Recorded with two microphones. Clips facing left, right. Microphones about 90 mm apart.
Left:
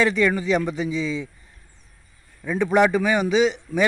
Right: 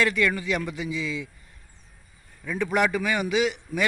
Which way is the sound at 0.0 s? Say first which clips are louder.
Left 4 dB; 25° left (ahead or behind).